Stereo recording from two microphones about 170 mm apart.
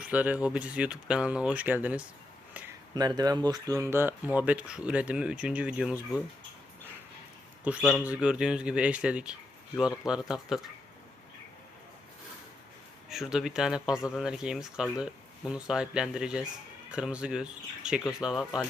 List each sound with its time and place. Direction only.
0.0 s speech: 10° right (ahead or behind)
2.9 s speech: 25° right (ahead or behind); by 6.2 s 5° right (ahead or behind)
7.6 s speech: 5° right (ahead or behind)
13.1 s speech: centre (ahead or behind)